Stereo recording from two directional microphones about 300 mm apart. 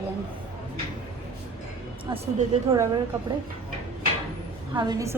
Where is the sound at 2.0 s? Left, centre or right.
Centre.